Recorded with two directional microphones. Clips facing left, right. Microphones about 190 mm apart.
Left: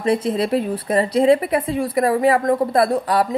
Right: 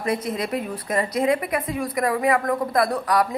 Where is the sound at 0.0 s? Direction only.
30° left (ahead or behind).